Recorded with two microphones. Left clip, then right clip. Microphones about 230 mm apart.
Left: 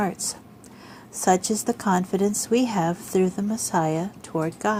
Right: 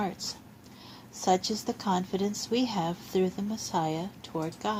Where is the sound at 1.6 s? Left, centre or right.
Left.